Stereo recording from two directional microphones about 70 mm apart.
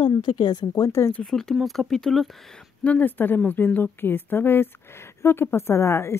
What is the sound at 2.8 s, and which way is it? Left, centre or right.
A woman's voice, left.